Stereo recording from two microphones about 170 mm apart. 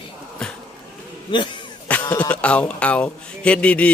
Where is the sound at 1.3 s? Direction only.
25° left (ahead or behind).